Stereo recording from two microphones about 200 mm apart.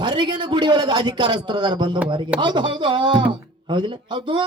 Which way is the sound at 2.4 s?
25° right (ahead or behind).